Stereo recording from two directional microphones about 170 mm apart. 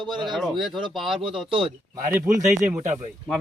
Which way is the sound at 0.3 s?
Centre (ahead or behind).